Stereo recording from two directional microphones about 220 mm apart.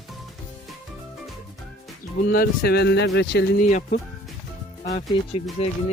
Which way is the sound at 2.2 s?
40° left (ahead or behind).